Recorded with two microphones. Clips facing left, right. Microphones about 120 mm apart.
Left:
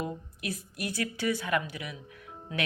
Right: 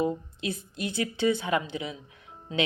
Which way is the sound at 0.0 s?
25° right (ahead or behind).